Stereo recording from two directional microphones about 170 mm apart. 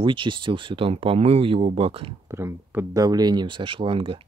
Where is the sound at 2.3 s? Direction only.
15° right (ahead or behind); by 4.2 s 30° right (ahead or behind).